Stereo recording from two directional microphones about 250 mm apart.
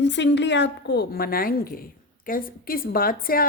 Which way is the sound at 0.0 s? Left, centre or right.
Left.